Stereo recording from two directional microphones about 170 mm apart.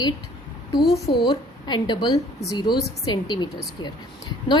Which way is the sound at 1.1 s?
25° left (ahead or behind).